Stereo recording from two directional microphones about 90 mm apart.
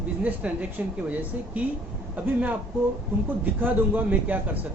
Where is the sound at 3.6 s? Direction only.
20° right (ahead or behind).